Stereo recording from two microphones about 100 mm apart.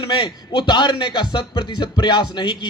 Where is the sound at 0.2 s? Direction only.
55° left (ahead or behind).